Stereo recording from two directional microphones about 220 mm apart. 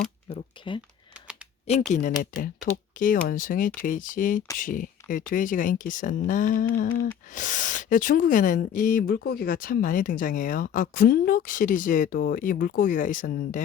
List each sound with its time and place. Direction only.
0.3 s speech: 20° left (ahead or behind)
1.9 s speech: 35° left (ahead or behind)